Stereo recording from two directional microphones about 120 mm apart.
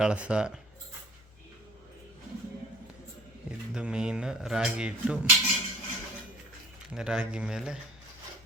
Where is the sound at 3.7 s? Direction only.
5° right (ahead or behind).